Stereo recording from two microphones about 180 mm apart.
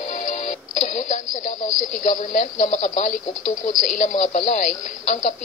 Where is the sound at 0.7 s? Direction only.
45° left (ahead or behind).